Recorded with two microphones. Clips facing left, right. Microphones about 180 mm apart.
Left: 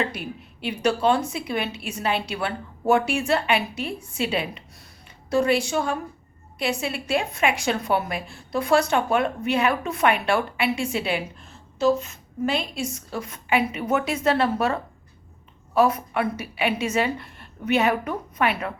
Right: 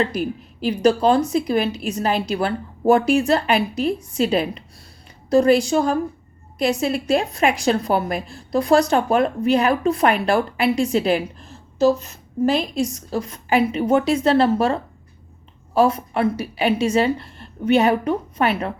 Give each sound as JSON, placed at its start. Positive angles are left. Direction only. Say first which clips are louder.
{"t": 0.1, "sound": "a woman's voice", "louder": "right 9 dB", "side_deg": -40}